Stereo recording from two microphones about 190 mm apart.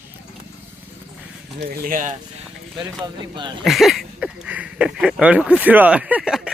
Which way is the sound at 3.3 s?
25° right (ahead or behind).